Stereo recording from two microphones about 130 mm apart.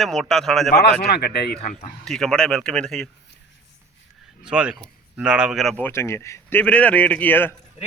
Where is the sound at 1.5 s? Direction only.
55° left (ahead or behind).